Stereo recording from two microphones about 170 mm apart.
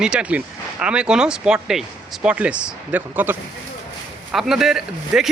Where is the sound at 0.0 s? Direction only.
5° right (ahead or behind).